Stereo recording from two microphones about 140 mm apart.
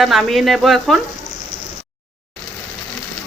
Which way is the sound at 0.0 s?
Centre (ahead or behind).